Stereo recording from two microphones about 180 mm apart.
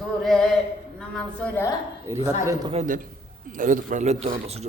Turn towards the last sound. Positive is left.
turn(degrees=-35)  # may be behind; listen again after turning